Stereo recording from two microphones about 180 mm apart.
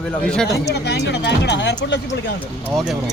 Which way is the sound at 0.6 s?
65° left (ahead or behind).